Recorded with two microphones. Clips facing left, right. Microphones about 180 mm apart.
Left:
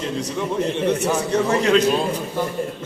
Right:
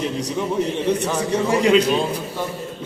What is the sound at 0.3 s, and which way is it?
A man's voice, 10° right (ahead or behind).